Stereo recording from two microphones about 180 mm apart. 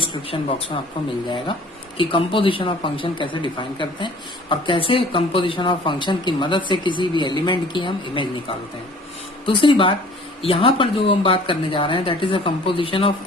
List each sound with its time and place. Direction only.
0.0 s speech: 30° left (ahead or behind)
2.0 s a man's voice: 30° left (ahead or behind)